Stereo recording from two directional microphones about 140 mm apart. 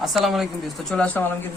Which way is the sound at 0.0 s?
Centre (ahead or behind).